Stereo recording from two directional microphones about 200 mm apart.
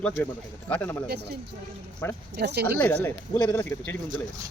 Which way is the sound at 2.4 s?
55° right (ahead or behind).